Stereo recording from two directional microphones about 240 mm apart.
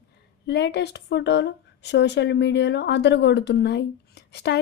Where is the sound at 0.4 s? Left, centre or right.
Left.